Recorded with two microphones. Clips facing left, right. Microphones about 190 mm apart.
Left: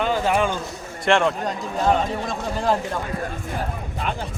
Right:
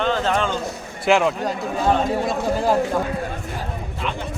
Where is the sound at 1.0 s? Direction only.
5° right (ahead or behind).